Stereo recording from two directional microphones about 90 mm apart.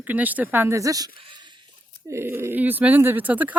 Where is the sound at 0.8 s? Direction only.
40° right (ahead or behind).